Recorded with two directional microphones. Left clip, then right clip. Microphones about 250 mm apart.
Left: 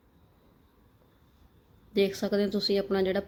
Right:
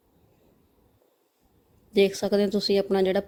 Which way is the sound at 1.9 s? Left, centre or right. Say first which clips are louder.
Right 5 dB; right.